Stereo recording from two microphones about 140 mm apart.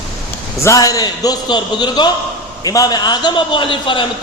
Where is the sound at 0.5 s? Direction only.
20° left (ahead or behind).